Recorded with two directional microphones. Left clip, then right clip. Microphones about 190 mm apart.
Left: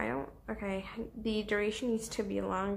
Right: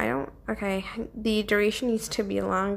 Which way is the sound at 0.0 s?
30° right (ahead or behind).